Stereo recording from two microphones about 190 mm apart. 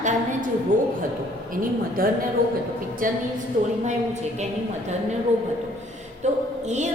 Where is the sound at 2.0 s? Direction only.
50° right (ahead or behind).